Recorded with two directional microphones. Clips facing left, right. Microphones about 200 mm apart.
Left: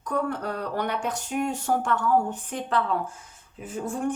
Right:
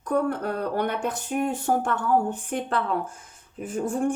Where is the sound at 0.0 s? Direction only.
55° right (ahead or behind).